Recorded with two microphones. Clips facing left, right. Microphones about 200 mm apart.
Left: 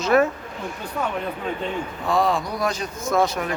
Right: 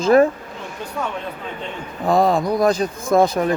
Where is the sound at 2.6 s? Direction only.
35° right (ahead or behind).